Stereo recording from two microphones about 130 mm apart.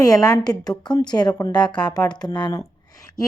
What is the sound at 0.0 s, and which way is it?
A woman's voice, 30° left (ahead or behind).